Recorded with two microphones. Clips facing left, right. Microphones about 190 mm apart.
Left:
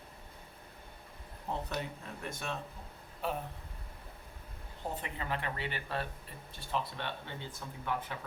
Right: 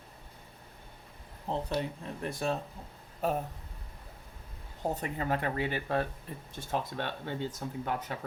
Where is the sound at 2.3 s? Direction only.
35° right (ahead or behind).